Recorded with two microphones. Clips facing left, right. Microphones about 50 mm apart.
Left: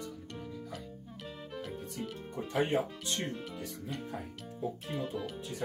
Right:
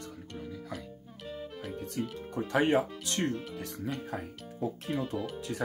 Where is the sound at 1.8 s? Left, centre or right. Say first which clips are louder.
Right 5 dB; right.